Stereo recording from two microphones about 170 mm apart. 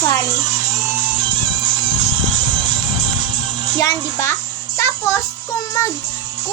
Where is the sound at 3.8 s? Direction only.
15° left (ahead or behind).